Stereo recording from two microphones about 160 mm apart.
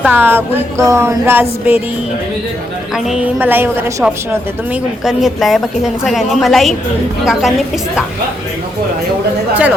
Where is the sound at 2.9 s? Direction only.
5° right (ahead or behind).